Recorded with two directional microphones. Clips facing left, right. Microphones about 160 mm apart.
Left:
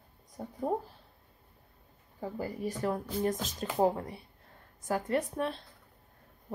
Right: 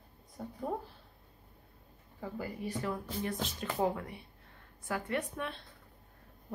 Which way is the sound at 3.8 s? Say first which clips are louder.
Left 5 dB; 35° left (ahead or behind).